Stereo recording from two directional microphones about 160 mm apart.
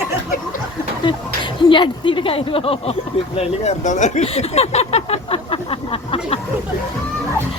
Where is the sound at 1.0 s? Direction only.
30° left (ahead or behind).